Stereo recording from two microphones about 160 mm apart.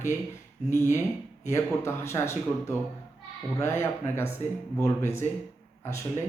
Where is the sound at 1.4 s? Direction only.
15° left (ahead or behind).